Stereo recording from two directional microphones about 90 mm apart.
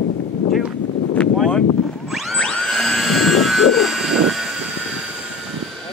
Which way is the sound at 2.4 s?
10° left (ahead or behind).